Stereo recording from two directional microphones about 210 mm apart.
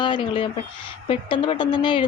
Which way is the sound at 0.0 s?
25° left (ahead or behind).